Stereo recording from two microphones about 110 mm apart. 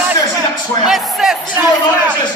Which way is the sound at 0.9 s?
5° right (ahead or behind).